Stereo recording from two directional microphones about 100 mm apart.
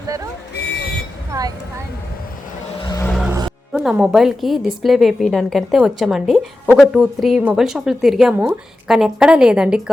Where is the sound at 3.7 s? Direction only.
5° right (ahead or behind).